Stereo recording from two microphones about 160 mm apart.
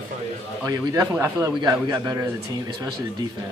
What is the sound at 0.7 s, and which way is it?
Speech, 20° right (ahead or behind).